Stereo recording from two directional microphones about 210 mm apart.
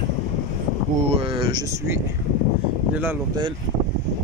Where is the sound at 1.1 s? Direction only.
25° right (ahead or behind).